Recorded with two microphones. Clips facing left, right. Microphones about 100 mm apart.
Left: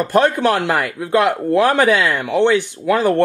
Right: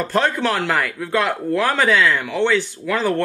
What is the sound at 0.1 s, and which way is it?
Speech, 15° left (ahead or behind).